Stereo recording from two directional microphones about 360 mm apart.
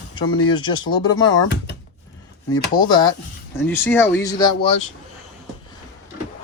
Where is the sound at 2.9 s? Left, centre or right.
Centre.